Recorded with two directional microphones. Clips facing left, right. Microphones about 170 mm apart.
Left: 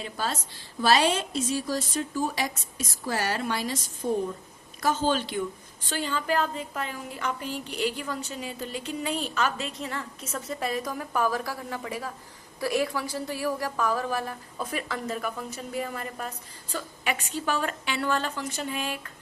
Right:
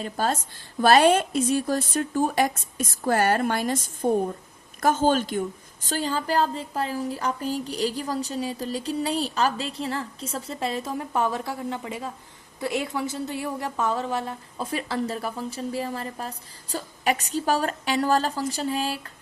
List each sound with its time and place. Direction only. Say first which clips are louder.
0.0 s a woman's voice: right 5 dB; 45° right (ahead or behind)